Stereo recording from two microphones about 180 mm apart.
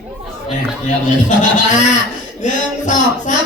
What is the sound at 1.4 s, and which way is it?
Speech, 45° left (ahead or behind).